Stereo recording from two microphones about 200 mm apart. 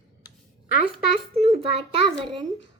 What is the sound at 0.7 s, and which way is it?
Speech, 50° left (ahead or behind).